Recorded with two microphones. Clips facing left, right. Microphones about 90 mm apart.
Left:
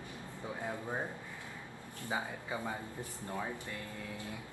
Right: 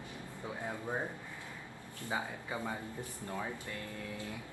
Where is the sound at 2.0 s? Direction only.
20° left (ahead or behind).